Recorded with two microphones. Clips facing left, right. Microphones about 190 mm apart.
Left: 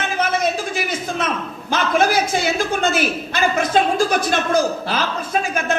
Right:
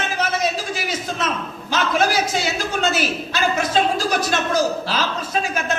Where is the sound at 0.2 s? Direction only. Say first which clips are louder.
Left 3 dB; 55° left (ahead or behind).